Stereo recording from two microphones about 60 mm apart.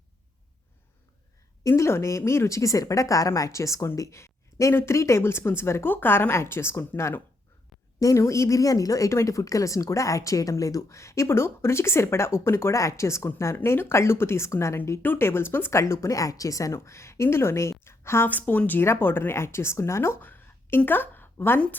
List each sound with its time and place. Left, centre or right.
1.6 s speech: left
7.9 s speech: left
15.0 s speech: left
15.7 s a woman's voice: left
16.7 s speech: left
18.3 s a woman's voice: left
18.8 s speech: left
20.2 s a sound: left